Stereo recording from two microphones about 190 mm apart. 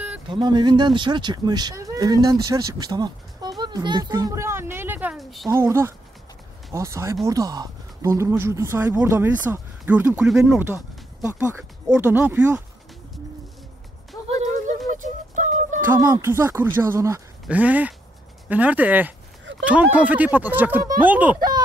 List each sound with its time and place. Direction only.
0.3 s speech: 20° right (ahead or behind); by 5.5 s centre (ahead or behind)
5.5 s speech: 15° right (ahead or behind)
14.2 s a sound: 35° right (ahead or behind)
15.0 s music: 40° right (ahead or behind)
16.0 s speech: 15° right (ahead or behind)
21.4 s a sound: 20° right (ahead or behind)